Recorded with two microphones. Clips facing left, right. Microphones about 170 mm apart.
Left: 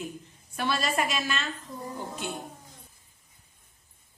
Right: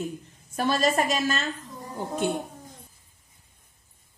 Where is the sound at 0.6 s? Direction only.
40° right (ahead or behind).